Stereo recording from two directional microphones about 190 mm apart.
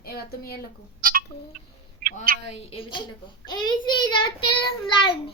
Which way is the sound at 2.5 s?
30° left (ahead or behind).